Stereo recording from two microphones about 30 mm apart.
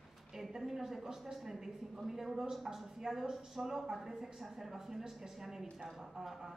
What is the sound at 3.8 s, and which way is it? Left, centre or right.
A woman's voice, centre.